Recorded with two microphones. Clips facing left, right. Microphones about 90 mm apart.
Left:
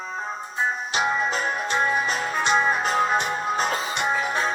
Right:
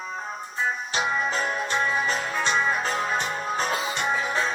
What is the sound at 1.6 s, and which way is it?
Music, 20° left (ahead or behind).